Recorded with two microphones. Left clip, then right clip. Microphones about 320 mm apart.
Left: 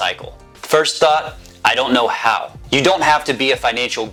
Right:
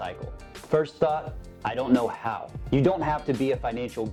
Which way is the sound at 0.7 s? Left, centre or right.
Centre.